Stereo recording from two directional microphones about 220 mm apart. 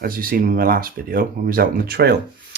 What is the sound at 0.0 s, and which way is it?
Speech, 40° right (ahead or behind).